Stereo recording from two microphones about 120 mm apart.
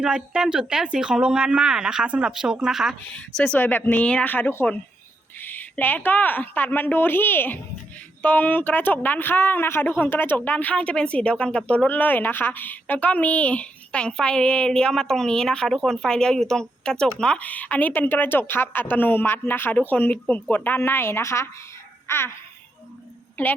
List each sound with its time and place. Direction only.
0.0 s speech: 10° right (ahead or behind)
3.1 s speech: 10° left (ahead or behind); by 21.5 s 25° left (ahead or behind)
22.0 s babbling: 20° left (ahead or behind)
23.4 s speech: 20° left (ahead or behind)